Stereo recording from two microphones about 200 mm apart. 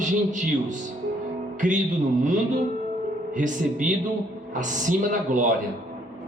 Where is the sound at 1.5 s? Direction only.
40° right (ahead or behind).